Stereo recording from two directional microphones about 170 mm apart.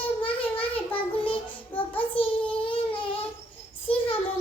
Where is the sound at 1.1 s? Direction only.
30° left (ahead or behind).